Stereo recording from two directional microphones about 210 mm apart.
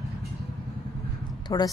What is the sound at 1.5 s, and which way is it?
Speech, 15° left (ahead or behind).